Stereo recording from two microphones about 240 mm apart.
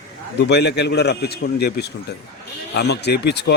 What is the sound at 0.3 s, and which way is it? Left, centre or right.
Speech, left.